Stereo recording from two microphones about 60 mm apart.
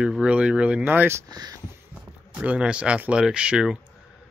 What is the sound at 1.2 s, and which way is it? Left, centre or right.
Speech, right.